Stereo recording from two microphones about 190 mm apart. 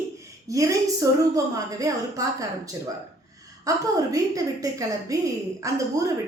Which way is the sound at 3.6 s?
15° right (ahead or behind).